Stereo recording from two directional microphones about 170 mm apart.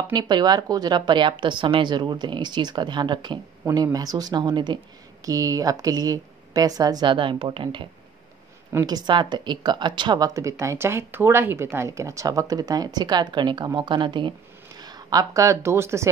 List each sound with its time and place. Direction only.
0.1 s speech: 25° right (ahead or behind)